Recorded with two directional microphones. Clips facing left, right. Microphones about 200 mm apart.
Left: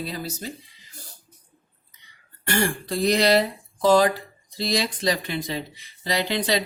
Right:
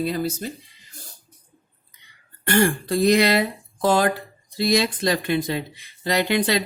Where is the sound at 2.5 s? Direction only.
55° right (ahead or behind).